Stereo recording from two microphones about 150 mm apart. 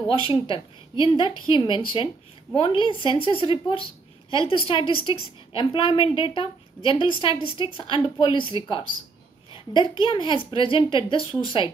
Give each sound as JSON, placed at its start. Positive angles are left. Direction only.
{"t": 0.2, "sound": "a woman's voice", "side_deg": 35}